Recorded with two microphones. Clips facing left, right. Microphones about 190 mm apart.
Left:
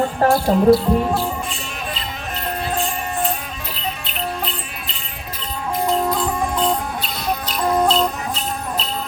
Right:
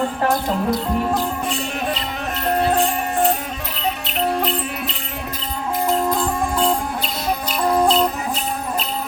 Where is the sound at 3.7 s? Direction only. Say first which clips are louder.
Right 5 dB; 70° right (ahead or behind).